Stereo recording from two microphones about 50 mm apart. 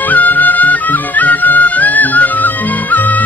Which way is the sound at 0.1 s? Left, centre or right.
Left.